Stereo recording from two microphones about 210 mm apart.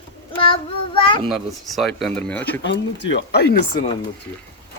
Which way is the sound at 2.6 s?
55° left (ahead or behind).